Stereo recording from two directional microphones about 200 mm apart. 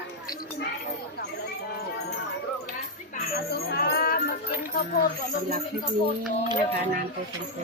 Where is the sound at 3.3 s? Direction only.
50° left (ahead or behind).